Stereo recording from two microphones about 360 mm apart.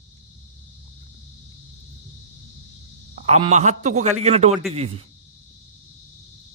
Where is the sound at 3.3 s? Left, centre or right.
Centre.